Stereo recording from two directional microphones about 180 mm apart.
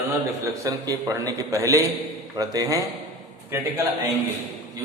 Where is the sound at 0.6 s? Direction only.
20° right (ahead or behind).